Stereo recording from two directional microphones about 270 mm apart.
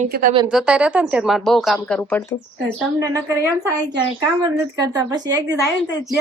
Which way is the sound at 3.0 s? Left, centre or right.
Centre.